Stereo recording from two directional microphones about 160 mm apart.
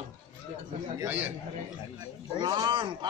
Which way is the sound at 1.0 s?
10° right (ahead or behind).